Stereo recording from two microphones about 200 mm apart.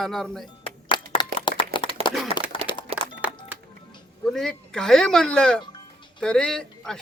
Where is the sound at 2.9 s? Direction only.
30° right (ahead or behind).